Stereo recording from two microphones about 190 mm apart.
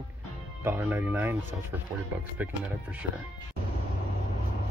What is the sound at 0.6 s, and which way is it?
Speech, 10° right (ahead or behind).